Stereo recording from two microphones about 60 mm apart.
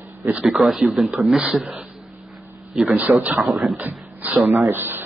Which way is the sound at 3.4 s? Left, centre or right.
Centre.